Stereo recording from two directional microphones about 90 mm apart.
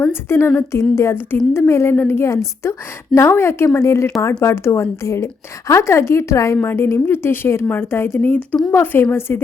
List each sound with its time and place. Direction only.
0.1 s a woman's voice: 30° left (ahead or behind)